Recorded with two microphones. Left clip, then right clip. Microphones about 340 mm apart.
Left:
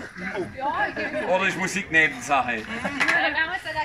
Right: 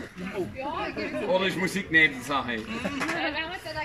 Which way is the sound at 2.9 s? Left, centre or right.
Left.